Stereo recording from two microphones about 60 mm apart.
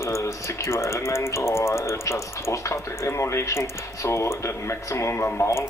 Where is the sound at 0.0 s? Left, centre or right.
Left.